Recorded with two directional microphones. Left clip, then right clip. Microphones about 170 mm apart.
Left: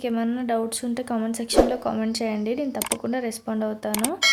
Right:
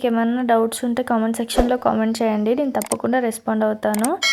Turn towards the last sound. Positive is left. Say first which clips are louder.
# even
turn(degrees=0)  # may be behind; listen again after turning